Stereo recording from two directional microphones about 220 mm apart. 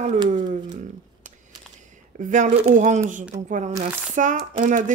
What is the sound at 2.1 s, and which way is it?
Speech, 35° right (ahead or behind).